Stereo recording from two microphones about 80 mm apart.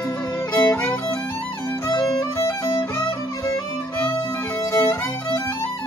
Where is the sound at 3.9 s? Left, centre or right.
Left.